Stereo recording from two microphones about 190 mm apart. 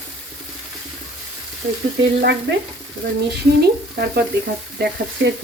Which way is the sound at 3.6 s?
55° right (ahead or behind).